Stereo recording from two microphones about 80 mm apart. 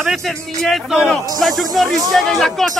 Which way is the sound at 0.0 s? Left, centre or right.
Centre.